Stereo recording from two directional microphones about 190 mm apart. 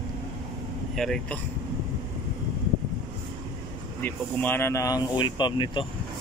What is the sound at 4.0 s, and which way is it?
Speech, 10° left (ahead or behind).